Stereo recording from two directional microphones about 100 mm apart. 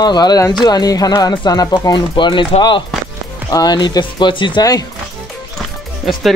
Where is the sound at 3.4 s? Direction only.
40° left (ahead or behind).